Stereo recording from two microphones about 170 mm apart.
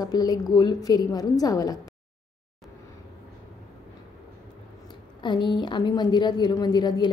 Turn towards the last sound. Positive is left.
turn(degrees=25)  # may be behind; listen again after turning